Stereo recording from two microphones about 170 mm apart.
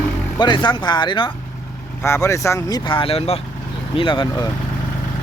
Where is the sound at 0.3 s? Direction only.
25° left (ahead or behind).